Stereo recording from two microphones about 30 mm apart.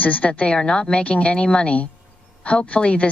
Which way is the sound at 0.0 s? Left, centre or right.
Left.